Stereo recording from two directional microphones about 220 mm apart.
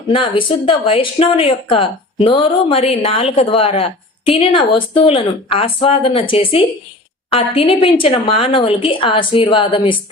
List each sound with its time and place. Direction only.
0.1 s speech: 25° left (ahead or behind)